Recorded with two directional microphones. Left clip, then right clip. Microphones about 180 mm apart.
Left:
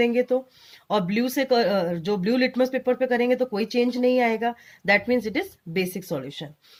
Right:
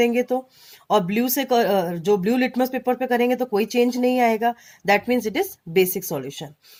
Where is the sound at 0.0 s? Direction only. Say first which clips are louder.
Right 1 dB; 40° right (ahead or behind).